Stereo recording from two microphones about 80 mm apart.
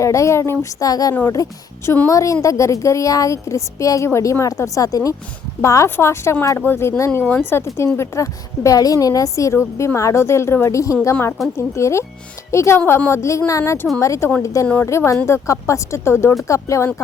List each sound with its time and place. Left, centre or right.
0.0 s a woman's voice: left